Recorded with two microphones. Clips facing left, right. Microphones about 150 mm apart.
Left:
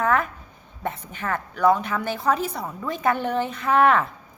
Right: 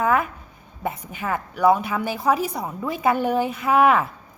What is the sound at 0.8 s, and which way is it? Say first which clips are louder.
A woman's voice: right 2 dB; 10° right (ahead or behind).